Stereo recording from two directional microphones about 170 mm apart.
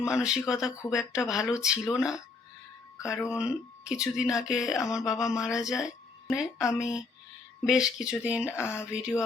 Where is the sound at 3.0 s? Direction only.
15° left (ahead or behind).